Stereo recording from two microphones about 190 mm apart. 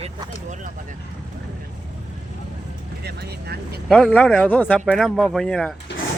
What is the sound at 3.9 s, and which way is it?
Speech, 5° left (ahead or behind).